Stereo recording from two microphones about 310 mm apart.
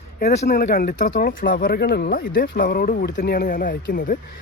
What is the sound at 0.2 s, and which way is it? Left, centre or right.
Speech, left.